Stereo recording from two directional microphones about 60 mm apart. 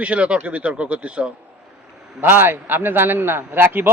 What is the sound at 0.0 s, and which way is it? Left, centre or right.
Speech, right.